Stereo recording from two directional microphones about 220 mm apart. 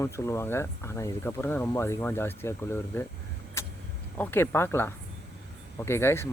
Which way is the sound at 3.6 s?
10° left (ahead or behind).